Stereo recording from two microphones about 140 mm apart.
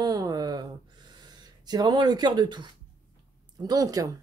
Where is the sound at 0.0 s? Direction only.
25° right (ahead or behind).